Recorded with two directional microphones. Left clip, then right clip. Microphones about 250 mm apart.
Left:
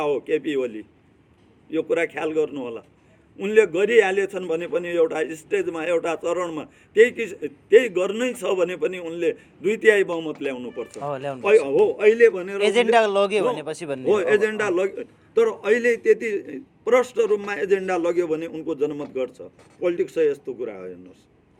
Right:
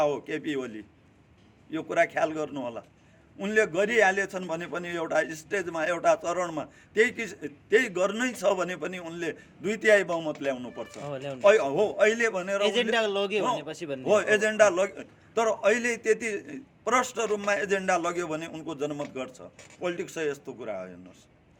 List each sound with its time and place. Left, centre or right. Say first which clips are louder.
0.3 s a man's voice: left 9 dB; right
10.9 s a man's voice: left 8 dB; centre
11.4 s a man's voice: left 4 dB; right
12.6 s a man's voice: left 10 dB; centre
14.0 s a man's voice: left 4 dB; right